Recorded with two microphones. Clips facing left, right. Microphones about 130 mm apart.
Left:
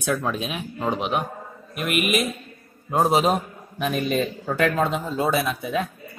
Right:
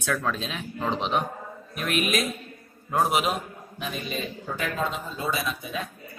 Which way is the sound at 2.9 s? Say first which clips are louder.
Left 4 dB; 20° left (ahead or behind).